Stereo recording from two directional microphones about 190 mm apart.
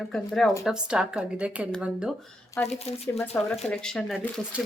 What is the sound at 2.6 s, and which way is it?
Speech, 35° left (ahead or behind).